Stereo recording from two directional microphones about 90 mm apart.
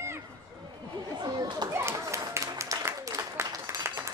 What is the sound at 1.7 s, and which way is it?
Applause, 30° right (ahead or behind).